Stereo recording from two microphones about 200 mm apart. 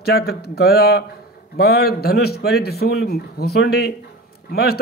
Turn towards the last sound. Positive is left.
turn(degrees=50)  # may be behind; listen again after turning